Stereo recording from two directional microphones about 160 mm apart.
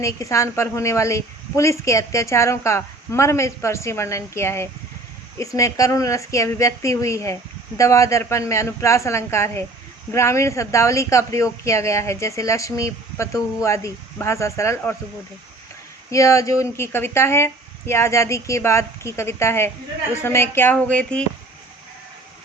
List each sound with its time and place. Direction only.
0.0 s a woman's voice: 20° left (ahead or behind)
16.1 s a woman's voice: 20° left (ahead or behind)